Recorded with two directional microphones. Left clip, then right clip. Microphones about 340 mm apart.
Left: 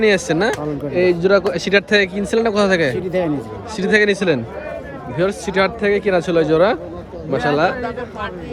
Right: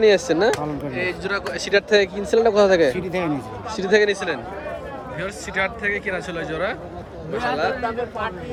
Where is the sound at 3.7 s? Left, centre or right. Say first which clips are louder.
Left 3 dB; centre.